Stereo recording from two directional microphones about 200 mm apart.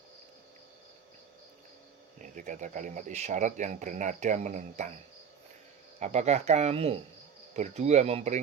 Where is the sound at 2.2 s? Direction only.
40° right (ahead or behind).